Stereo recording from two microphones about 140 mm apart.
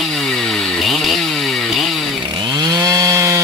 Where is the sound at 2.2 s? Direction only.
30° right (ahead or behind).